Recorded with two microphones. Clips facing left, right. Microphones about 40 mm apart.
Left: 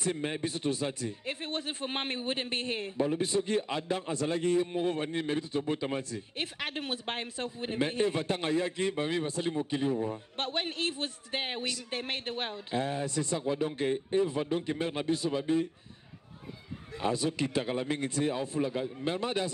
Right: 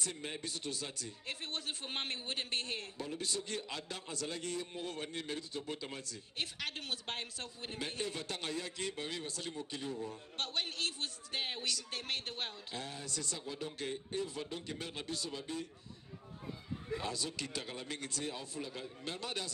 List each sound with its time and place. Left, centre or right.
0.0 s speech: left
17.0 s speech: left